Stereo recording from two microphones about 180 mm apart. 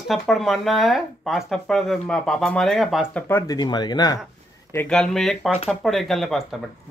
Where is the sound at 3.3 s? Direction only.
20° left (ahead or behind).